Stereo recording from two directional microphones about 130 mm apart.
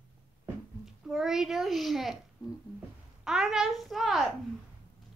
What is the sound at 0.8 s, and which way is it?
A child's voice, 5° right (ahead or behind).